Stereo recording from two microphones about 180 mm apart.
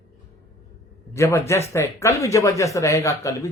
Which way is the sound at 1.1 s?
15° left (ahead or behind).